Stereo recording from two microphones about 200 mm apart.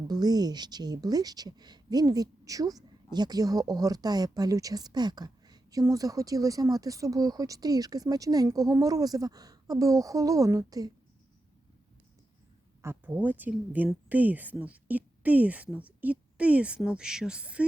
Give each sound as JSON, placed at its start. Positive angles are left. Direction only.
{"t": 0.1, "sound": "a woman's voice", "side_deg": -20}
{"t": 12.8, "sound": "speech", "side_deg": -10}